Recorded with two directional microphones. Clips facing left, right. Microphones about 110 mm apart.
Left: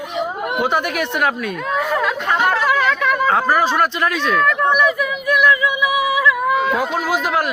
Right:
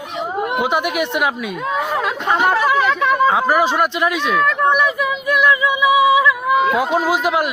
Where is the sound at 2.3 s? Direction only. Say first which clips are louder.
Right 2 dB; 15° right (ahead or behind).